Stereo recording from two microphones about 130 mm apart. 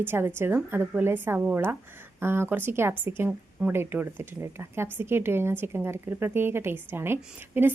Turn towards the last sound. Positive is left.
turn(degrees=-15)  # may be behind; listen again after turning